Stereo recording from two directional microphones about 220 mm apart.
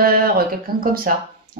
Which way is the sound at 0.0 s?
40° right (ahead or behind).